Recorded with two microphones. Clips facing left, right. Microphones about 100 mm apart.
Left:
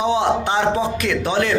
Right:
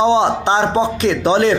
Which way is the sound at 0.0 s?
25° right (ahead or behind).